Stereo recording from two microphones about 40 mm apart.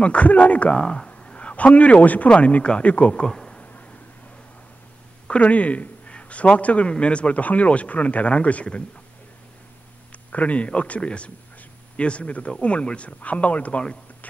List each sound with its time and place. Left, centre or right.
0.0 s a man's voice: left
0.7 s a man's voice: left
2.2 s speech: left
2.8 s a man's voice: left
3.2 s a sound: centre
5.3 s a man's voice: left
10.1 s a man's voice: left